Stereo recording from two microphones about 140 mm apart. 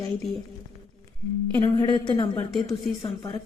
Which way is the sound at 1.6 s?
30° left (ahead or behind).